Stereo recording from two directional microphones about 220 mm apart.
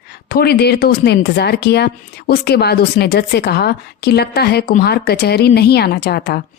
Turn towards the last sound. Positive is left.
turn(degrees=45)  # may be behind; listen again after turning